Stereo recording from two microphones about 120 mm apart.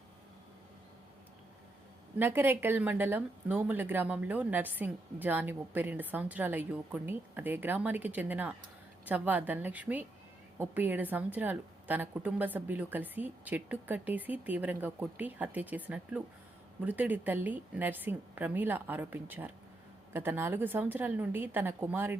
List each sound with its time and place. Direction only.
2.1 s speech: 15° right (ahead or behind)